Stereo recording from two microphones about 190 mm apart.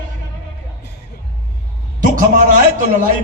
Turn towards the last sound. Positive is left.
turn(degrees=-45)  # may be behind; listen again after turning